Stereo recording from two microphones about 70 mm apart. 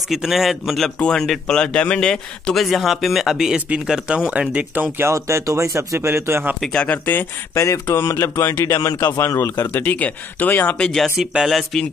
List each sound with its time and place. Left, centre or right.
0.1 s a man's voice: centre
0.9 s a man's voice: centre
4.9 s speech: right
6.7 s speech: centre
7.5 s speech: left
9.7 s speech: left
10.8 s a man's voice: centre